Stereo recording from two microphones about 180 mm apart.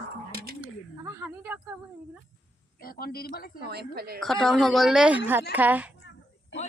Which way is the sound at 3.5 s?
65° right (ahead or behind).